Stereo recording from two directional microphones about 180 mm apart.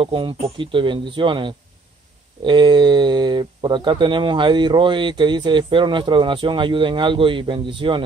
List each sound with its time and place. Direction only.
0.0 s speech: 30° right (ahead or behind)